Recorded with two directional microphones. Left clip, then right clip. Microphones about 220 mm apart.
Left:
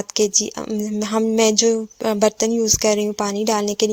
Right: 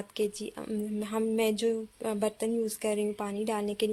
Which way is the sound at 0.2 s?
35° left (ahead or behind).